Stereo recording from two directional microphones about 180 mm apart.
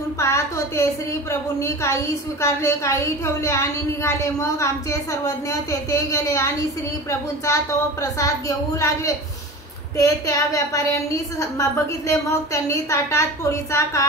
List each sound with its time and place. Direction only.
0.2 s a woman's voice: 15° left (ahead or behind)